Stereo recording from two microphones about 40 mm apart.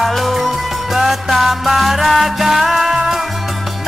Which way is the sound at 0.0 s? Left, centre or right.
Centre.